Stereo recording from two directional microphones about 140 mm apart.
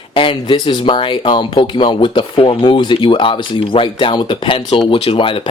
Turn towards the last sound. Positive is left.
turn(degrees=40)  # may be behind; listen again after turning